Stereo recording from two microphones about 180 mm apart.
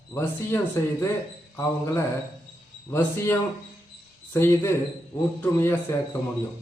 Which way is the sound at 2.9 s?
10° left (ahead or behind).